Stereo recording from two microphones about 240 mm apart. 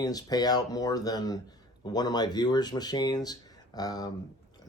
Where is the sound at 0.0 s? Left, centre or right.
Centre.